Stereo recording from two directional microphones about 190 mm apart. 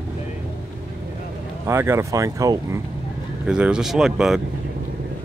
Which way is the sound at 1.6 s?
15° right (ahead or behind).